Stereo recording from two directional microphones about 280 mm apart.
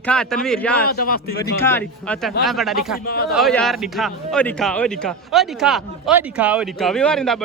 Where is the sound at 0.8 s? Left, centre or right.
Left.